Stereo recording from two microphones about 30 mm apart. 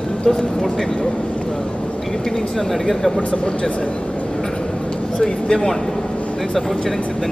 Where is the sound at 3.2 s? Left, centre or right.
Left.